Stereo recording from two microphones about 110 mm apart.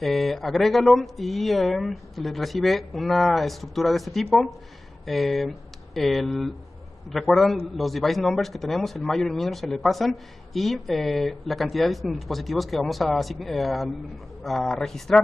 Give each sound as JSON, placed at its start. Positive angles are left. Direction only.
{"t": 0.0, "sound": "a man's voice", "side_deg": 0}